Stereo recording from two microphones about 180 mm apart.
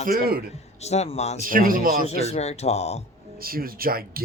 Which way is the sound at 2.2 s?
35° left (ahead or behind).